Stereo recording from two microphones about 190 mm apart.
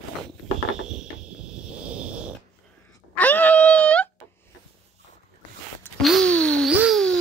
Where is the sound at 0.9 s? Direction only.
5° right (ahead or behind).